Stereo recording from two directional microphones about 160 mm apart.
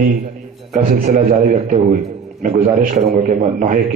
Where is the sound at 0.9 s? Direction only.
55° right (ahead or behind).